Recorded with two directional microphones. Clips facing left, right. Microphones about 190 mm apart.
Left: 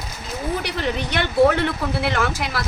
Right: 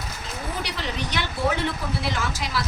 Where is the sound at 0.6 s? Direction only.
55° left (ahead or behind).